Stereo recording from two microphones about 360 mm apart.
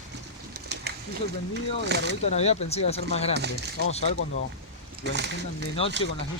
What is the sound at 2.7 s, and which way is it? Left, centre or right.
Speech, centre.